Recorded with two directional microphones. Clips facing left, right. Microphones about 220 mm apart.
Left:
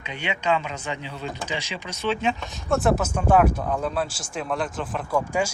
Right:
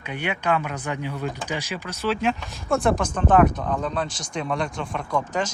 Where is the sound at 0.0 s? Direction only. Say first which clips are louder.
Right 1 dB; 10° right (ahead or behind).